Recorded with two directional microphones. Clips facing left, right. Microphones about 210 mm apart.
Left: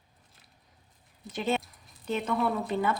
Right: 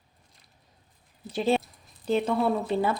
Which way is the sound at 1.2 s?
30° right (ahead or behind).